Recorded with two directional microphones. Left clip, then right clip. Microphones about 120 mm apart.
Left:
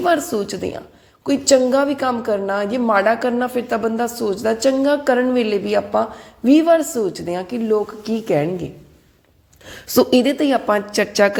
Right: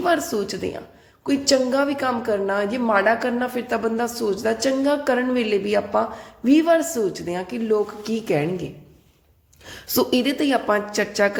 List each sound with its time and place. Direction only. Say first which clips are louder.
0.0 s a woman's voice: left 3 dB; 25° left (ahead or behind)
10.7 s a woman's voice: left 3 dB; 40° left (ahead or behind)